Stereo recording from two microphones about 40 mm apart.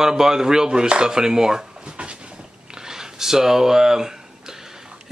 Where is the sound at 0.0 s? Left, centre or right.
Centre.